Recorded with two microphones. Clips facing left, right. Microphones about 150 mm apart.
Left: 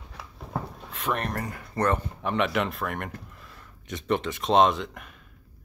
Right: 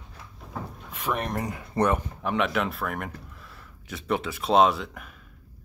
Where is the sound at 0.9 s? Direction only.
5° right (ahead or behind).